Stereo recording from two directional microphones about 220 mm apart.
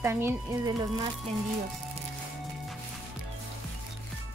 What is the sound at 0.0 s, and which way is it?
Speech, 10° right (ahead or behind).